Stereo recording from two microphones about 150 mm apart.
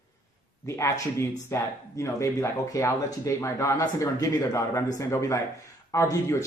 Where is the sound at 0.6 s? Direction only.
20° left (ahead or behind).